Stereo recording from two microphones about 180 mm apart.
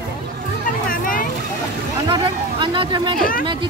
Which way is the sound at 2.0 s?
25° right (ahead or behind).